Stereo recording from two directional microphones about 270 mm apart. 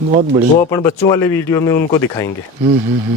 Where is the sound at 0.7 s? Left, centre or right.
Centre.